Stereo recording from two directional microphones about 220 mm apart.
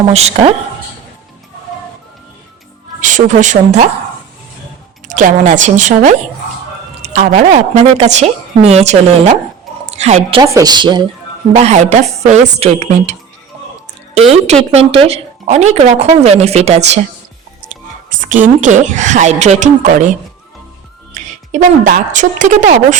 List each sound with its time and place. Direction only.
0.1 s speech: 30° right (ahead or behind)
3.0 s a woman's voice: 35° right (ahead or behind)
5.0 s a woman's voice: 35° right (ahead or behind)
18.1 s a woman's voice: 35° right (ahead or behind)
21.1 s a woman's voice: 35° right (ahead or behind)